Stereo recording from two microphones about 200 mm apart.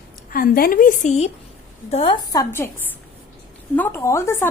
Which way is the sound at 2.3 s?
15° left (ahead or behind).